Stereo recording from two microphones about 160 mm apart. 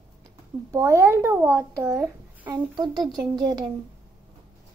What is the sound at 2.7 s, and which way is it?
Speech, 25° right (ahead or behind).